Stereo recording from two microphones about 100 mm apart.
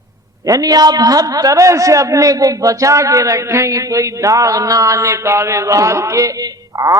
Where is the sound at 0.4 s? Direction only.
35° right (ahead or behind).